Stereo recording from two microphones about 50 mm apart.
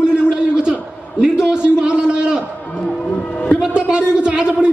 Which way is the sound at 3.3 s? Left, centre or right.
Left.